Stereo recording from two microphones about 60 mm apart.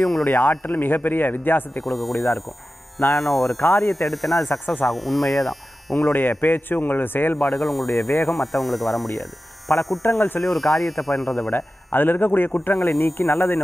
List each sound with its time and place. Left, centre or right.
0.0 s speech: centre
0.3 s speech: left
1.8 s speech: centre
4.5 s speech: left
4.8 s speech: centre
6.4 s speech: left
7.3 s speech: centre
10.0 s speech: left
10.4 s speech: centre
11.5 s speech: left